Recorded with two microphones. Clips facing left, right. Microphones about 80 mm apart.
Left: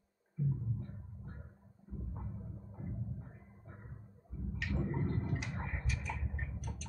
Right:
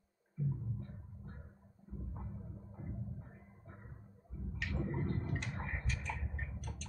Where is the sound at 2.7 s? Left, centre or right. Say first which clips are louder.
Left 2 dB; centre.